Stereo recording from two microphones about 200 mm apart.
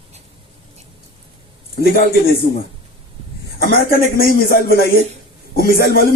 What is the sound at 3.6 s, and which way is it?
Speech, 50° left (ahead or behind).